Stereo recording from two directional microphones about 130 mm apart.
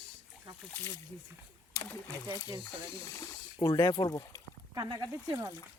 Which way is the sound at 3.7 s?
40° left (ahead or behind).